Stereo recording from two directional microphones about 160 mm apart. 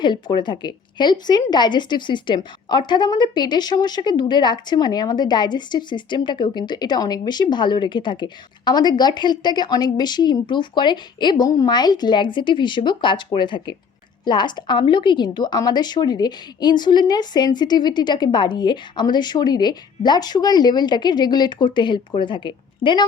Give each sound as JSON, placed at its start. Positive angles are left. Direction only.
{"t": 0.0, "sound": "a woman's voice", "side_deg": 30}